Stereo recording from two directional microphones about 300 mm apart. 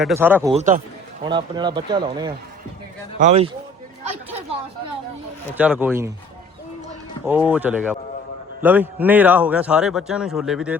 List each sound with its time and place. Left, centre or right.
0.0 s speech: centre
0.5 s a man's voice: right
5.5 s speech: centre
7.3 s speech: centre